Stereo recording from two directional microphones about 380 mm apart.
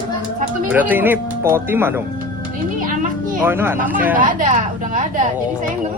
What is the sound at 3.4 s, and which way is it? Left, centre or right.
Speech, centre.